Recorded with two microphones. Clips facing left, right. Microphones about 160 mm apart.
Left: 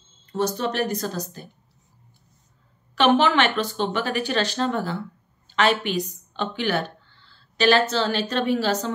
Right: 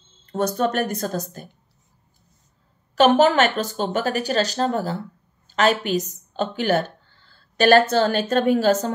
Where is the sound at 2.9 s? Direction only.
40° right (ahead or behind).